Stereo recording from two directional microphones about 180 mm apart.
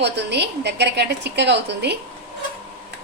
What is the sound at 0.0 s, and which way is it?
A woman's voice, 70° right (ahead or behind).